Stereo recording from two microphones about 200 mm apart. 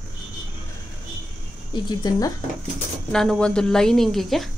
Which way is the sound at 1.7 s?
20° left (ahead or behind).